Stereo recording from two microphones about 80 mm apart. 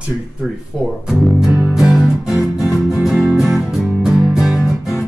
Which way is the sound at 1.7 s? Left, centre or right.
Centre.